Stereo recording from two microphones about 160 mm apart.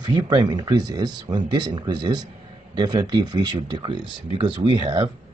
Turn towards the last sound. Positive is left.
turn(degrees=-25)  # may be behind; listen again after turning